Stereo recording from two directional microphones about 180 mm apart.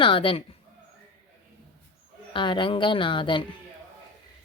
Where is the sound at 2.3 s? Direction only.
25° left (ahead or behind).